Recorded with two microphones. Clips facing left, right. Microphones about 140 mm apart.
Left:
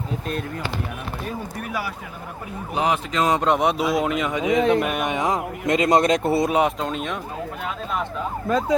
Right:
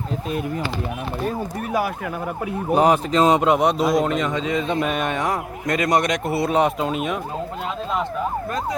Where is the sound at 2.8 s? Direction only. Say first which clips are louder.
Right 5 dB; 45° right (ahead or behind).